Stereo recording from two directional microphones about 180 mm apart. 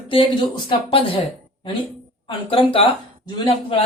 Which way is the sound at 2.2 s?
30° left (ahead or behind).